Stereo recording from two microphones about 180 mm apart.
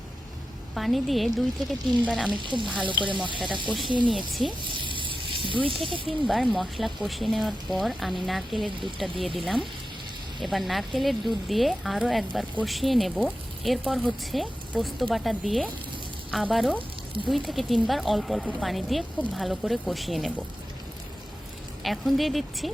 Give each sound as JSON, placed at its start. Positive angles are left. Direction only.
{"t": 0.7, "sound": "speech", "side_deg": 0}
{"t": 2.3, "sound": "speech", "side_deg": -25}
{"t": 4.3, "sound": "speech", "side_deg": 0}
{"t": 4.8, "sound": "sizzle", "side_deg": -25}
{"t": 6.1, "sound": "speech", "side_deg": 0}
{"t": 21.8, "sound": "speech", "side_deg": 0}